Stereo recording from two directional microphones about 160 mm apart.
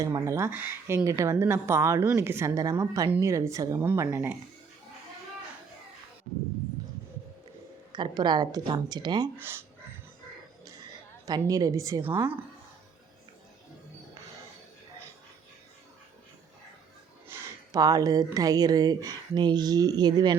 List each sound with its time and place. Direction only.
0.0 s speech: 20° right (ahead or behind)
7.9 s speech: 30° right (ahead or behind)
9.4 s speech: 15° right (ahead or behind)
11.3 s speech: 20° right (ahead or behind)
17.2 s speech: 20° right (ahead or behind)